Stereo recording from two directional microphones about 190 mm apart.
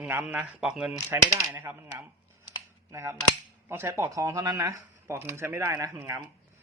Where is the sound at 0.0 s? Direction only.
10° right (ahead or behind).